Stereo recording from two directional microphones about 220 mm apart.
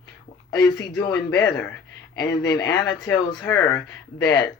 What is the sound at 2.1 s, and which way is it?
Speech, 15° left (ahead or behind).